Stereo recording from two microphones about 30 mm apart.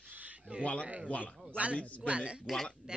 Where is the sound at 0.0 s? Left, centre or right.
Right.